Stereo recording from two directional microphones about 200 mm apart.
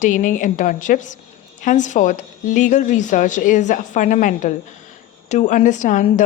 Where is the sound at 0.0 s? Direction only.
40° left (ahead or behind).